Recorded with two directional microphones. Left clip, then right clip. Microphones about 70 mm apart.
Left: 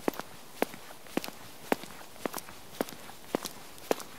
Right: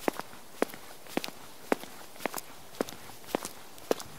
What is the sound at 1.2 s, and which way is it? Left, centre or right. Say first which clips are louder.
Walk: right 1 dB; centre.